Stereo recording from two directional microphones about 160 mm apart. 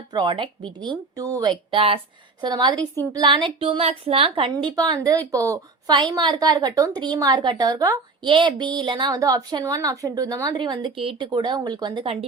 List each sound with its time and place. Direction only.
0.1 s a woman's voice: 30° right (ahead or behind)
4.5 s a woman's voice: 25° right (ahead or behind)